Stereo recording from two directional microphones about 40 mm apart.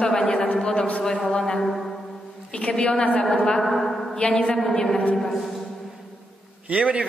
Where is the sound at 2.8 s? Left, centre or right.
Left.